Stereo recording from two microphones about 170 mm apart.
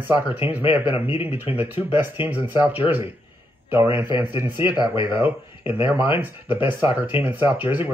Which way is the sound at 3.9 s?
15° right (ahead or behind).